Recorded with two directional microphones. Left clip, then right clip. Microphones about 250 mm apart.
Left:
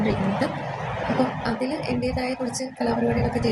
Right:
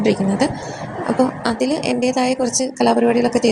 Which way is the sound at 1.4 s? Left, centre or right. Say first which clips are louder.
Right 7 dB; right.